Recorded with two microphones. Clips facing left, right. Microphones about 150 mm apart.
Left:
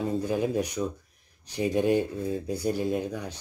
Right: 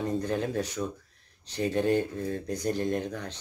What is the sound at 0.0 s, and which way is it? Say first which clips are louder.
Speech: left 2 dB; 10° left (ahead or behind).